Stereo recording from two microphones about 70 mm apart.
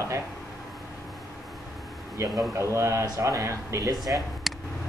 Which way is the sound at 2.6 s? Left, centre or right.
Right.